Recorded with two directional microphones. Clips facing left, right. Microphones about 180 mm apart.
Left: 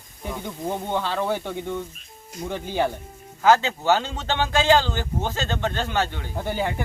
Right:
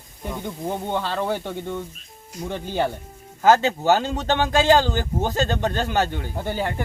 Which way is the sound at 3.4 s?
40° right (ahead or behind).